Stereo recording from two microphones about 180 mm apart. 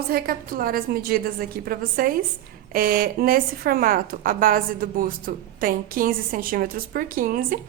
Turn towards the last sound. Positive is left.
turn(degrees=-50)  # may be behind; listen again after turning